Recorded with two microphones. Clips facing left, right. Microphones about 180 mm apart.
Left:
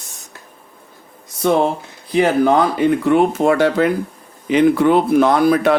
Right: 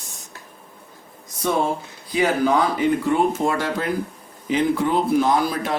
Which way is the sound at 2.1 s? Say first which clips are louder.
Left 5 dB; 60° left (ahead or behind).